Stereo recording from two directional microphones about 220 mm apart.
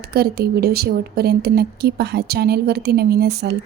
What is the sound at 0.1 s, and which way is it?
Speech, 45° right (ahead or behind).